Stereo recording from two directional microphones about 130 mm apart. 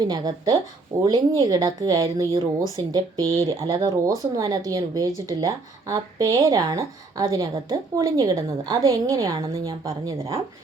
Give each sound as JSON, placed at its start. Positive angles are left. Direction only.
{"t": 0.0, "sound": "speech", "side_deg": -30}